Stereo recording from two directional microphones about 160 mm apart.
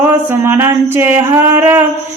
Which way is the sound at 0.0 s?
15° right (ahead or behind).